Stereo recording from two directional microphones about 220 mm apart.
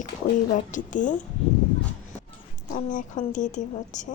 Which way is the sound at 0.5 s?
35° left (ahead or behind).